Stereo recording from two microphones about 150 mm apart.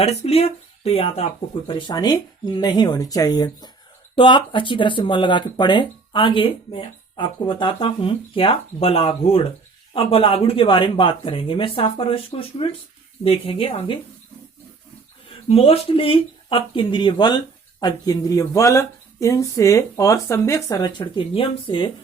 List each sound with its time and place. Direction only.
0.0 s speech: 45° left (ahead or behind)
15.4 s speech: 40° left (ahead or behind)